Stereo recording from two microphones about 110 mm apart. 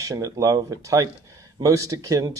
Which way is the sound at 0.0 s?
30° right (ahead or behind).